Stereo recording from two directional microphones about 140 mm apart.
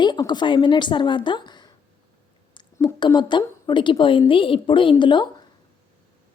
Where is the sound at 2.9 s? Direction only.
35° left (ahead or behind).